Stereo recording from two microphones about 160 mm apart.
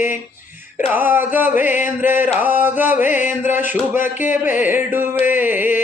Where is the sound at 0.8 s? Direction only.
10° right (ahead or behind).